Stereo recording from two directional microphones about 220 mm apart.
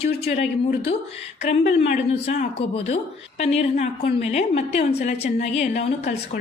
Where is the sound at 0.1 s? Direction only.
45° left (ahead or behind).